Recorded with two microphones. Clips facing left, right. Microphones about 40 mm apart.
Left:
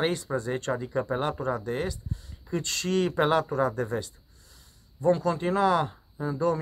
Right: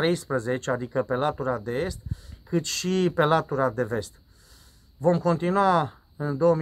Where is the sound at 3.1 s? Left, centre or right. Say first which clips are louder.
Right 2 dB; centre.